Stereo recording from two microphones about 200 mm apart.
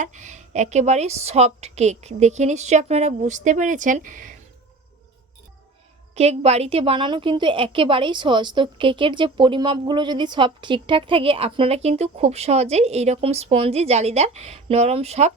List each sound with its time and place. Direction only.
0.0 s a woman's voice: 35° right (ahead or behind)
6.1 s a woman's voice: 30° right (ahead or behind)